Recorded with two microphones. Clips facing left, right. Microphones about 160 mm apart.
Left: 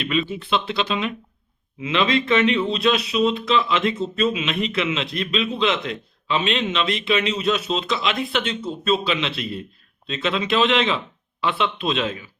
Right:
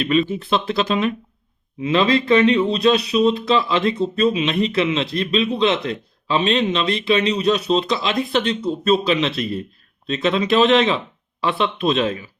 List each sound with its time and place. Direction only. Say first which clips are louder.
0.0 s speech: right 5 dB; 40° right (ahead or behind)